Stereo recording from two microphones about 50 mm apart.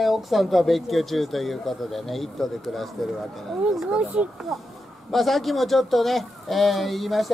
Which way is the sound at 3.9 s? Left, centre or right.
Right.